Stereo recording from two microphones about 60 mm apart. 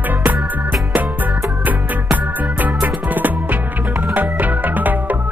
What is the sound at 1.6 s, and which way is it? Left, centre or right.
Music, right.